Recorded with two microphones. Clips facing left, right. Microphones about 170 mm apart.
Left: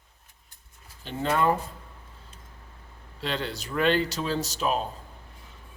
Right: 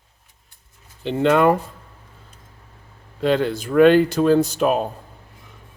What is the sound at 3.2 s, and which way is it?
Speech, 50° right (ahead or behind).